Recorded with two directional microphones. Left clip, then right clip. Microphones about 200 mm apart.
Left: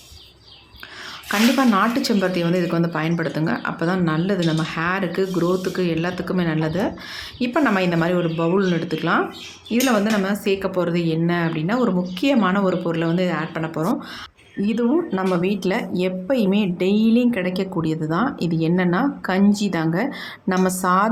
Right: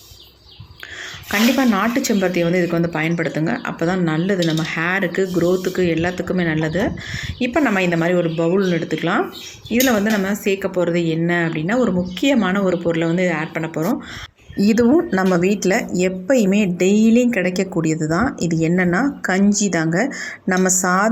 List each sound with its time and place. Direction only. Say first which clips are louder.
1.3 s speech: right 1 dB; 5° right (ahead or behind)
14.6 s speech: right 5 dB; 20° right (ahead or behind)